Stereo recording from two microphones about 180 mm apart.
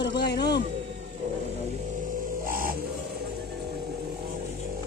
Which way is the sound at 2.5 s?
50° right (ahead or behind).